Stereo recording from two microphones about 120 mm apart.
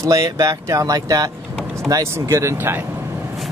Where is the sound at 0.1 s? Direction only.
30° right (ahead or behind).